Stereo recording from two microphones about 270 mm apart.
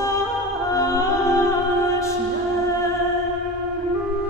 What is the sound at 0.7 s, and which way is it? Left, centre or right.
Music, centre.